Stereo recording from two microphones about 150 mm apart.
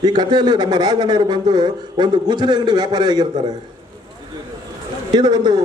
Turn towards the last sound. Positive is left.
turn(degrees=-30)  # may be behind; listen again after turning